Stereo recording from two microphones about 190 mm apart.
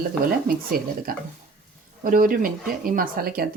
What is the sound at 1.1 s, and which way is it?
Speech, 50° right (ahead or behind).